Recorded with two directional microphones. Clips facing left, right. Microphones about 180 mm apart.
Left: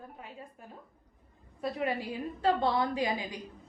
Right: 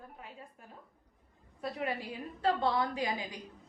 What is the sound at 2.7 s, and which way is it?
Speech, 25° left (ahead or behind).